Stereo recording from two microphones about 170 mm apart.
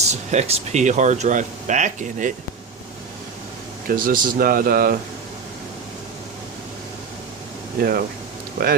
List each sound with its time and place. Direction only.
0.1 s speech: 40° right (ahead or behind)
3.8 s speech: 55° right (ahead or behind)
7.8 s speech: 60° right (ahead or behind)